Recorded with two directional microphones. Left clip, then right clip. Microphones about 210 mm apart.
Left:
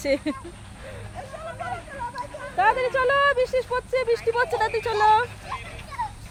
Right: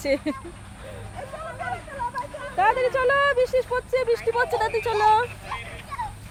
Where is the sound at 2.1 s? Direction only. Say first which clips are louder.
Left 3 dB; 20° left (ahead or behind).